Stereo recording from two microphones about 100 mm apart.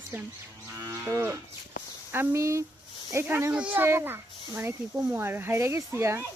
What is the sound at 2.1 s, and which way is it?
Speech, 30° right (ahead or behind).